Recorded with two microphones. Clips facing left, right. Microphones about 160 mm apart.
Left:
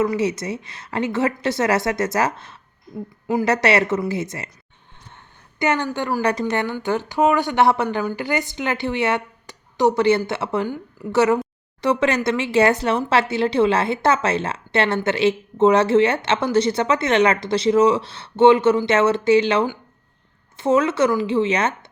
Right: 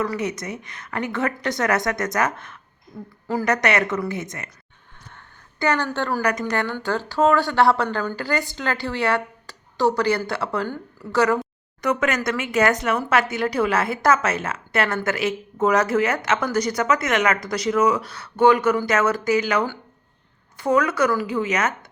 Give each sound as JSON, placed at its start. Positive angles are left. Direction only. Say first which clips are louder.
{"t": 0.0, "sound": "speech", "louder": "left 5 dB", "side_deg": 25}
{"t": 5.1, "sound": "a sound", "louder": "left 2 dB", "side_deg": 20}
{"t": 6.4, "sound": "speech", "louder": "left 2 dB", "side_deg": 20}